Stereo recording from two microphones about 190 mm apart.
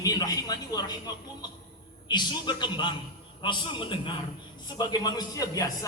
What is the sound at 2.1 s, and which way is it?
A man's voice, 25° left (ahead or behind).